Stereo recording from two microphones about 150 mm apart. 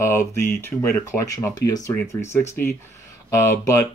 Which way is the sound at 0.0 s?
15° left (ahead or behind).